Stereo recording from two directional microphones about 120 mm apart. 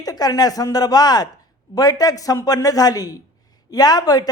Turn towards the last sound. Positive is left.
turn(degrees=35)  # may be behind; listen again after turning